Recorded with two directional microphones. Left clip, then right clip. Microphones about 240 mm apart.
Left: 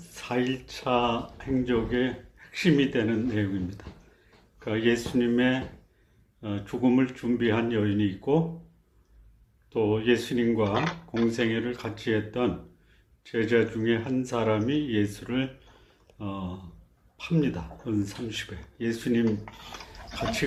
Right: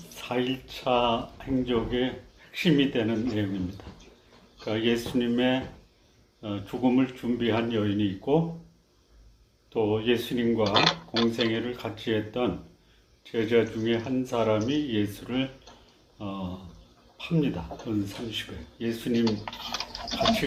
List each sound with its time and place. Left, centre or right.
0.2 s speech: left
9.7 s speech: left